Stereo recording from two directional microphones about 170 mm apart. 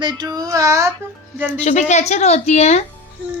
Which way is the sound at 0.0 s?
25° right (ahead or behind).